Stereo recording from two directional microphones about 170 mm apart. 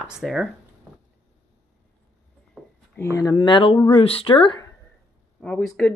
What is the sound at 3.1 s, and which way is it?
Speech, 20° left (ahead or behind).